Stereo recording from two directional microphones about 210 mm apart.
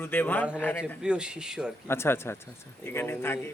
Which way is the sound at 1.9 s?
10° left (ahead or behind).